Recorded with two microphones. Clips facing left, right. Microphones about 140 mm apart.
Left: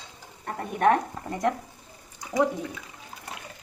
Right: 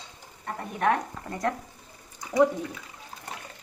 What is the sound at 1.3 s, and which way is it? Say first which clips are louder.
Speech: left 3 dB; 15° left (ahead or behind).